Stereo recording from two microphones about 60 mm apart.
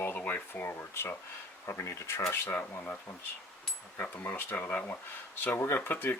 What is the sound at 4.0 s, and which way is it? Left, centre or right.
Speech, left.